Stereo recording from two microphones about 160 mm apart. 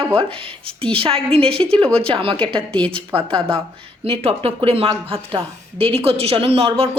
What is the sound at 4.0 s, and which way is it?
Speech, 40° right (ahead or behind).